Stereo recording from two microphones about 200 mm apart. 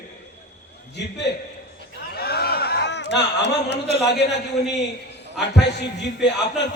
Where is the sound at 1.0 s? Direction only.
60° left (ahead or behind).